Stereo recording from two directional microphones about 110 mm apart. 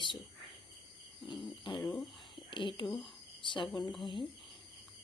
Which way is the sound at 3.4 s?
45° left (ahead or behind).